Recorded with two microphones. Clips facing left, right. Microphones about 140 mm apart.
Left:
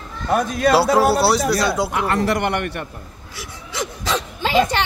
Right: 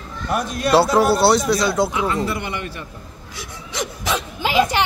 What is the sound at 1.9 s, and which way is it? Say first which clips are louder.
A man's voice: left 2 dB; 65° left (ahead or behind).